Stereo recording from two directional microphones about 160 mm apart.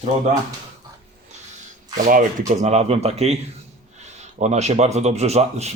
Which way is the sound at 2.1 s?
50° right (ahead or behind).